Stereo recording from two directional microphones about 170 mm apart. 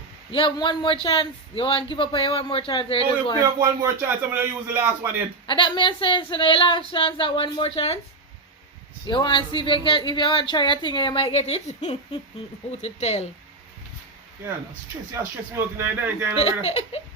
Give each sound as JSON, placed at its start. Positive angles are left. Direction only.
{"t": 0.3, "sound": "speech", "side_deg": 30}
{"t": 3.6, "sound": "speech", "side_deg": -15}
{"t": 5.5, "sound": "speech", "side_deg": 30}
{"t": 9.0, "sound": "speech", "side_deg": 30}
{"t": 15.1, "sound": "speech", "side_deg": -15}
{"t": 16.3, "sound": "speech", "side_deg": 35}